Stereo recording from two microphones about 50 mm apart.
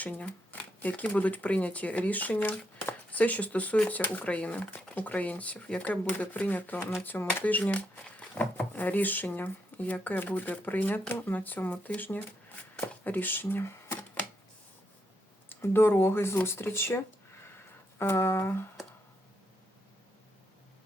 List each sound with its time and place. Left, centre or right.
0.0 s speech: left
7.6 s speech: left
15.6 s speech: left
17.9 s speech: left